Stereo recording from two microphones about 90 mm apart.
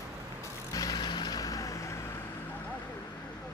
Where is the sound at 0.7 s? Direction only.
40° left (ahead or behind).